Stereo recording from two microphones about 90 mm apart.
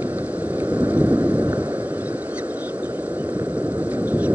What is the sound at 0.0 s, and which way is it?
Thunder, 15° right (ahead or behind).